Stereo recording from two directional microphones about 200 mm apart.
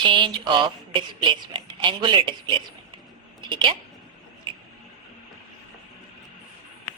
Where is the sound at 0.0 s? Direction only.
25° right (ahead or behind).